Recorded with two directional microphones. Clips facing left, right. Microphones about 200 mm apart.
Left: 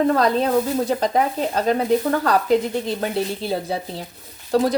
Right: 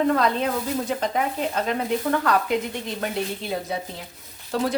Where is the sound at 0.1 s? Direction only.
35° left (ahead or behind).